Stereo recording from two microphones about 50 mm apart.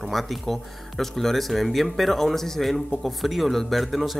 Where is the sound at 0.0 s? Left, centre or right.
Centre.